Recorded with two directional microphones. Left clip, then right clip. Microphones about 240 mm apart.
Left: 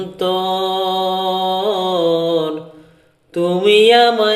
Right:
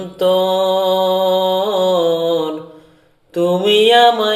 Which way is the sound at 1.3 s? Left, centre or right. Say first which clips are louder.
Right 2 dB; centre.